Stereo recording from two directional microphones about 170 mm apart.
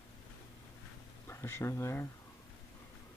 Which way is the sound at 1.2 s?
15° left (ahead or behind).